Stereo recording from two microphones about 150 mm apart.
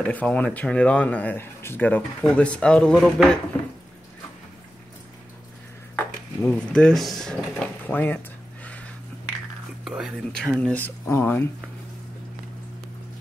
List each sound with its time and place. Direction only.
0.0 s speech: 10° left (ahead or behind)
5.9 s speech: 10° left (ahead or behind)
8.6 s a sound: 10° left (ahead or behind)
9.8 s speech: 5° right (ahead or behind); by 11.4 s 15° left (ahead or behind)